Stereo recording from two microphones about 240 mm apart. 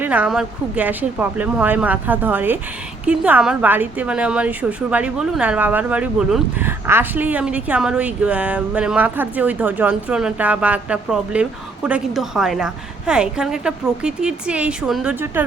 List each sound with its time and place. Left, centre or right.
0.0 s a woman's voice: centre